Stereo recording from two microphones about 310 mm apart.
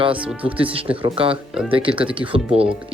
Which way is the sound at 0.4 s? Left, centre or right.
Centre.